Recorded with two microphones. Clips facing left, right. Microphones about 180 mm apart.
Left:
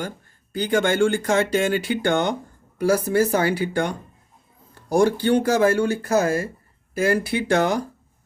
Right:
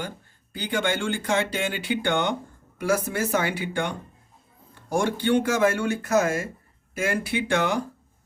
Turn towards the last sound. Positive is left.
turn(degrees=40)  # may be behind; listen again after turning